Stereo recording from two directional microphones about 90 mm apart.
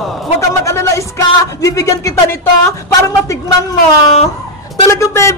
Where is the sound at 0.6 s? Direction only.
35° left (ahead or behind).